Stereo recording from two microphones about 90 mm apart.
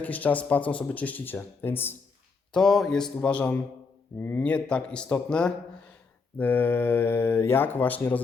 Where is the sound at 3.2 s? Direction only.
15° left (ahead or behind).